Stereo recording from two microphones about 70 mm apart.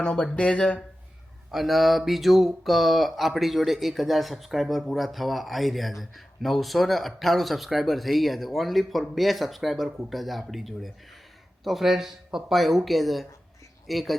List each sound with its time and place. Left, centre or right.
0.0 s speech: centre
1.5 s mantra: centre